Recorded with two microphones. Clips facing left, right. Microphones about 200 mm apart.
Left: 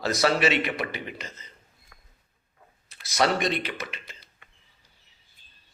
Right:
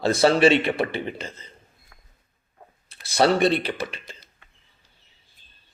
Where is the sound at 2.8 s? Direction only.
30° right (ahead or behind).